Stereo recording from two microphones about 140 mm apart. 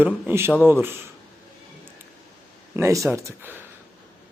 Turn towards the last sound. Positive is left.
turn(degrees=-20)  # may be behind; listen again after turning